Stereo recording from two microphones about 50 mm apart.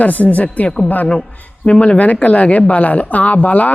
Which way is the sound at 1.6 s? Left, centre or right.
Left.